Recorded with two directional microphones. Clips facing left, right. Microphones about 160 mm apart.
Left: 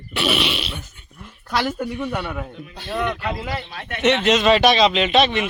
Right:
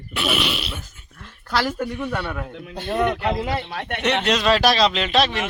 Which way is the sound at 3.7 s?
65° right (ahead or behind).